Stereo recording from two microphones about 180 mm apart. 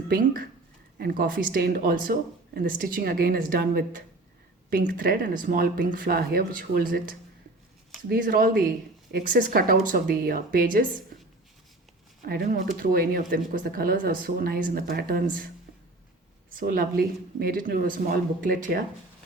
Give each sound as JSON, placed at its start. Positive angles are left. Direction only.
{"t": 0.1, "sound": "speech", "side_deg": -50}
{"t": 12.2, "sound": "speech", "side_deg": -50}
{"t": 16.5, "sound": "speech", "side_deg": -50}